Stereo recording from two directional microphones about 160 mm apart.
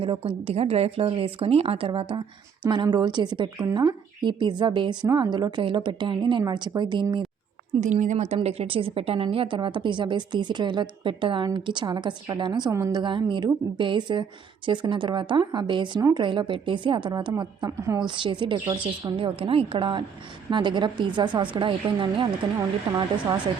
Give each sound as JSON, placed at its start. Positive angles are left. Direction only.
{"t": 0.0, "sound": "speech", "side_deg": -35}
{"t": 7.8, "sound": "a woman's voice", "side_deg": -50}